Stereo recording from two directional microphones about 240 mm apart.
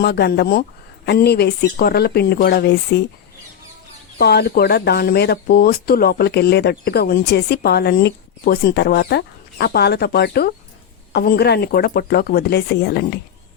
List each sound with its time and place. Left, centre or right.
0.0 s speech: left
4.2 s speech: left